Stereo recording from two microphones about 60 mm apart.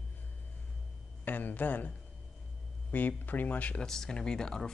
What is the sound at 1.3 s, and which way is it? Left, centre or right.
Speech, left.